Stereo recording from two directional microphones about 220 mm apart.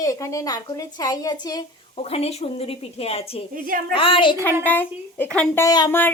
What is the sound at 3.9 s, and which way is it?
Speech, 25° left (ahead or behind).